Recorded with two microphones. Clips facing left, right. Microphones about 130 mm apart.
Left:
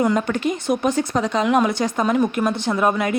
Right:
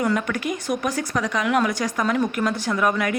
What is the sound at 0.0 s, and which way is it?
Speech, 25° left (ahead or behind).